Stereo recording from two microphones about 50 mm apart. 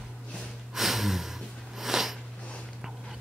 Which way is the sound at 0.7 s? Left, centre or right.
Centre.